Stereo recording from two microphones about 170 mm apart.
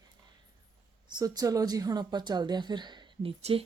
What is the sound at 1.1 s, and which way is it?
A woman's voice, 25° right (ahead or behind).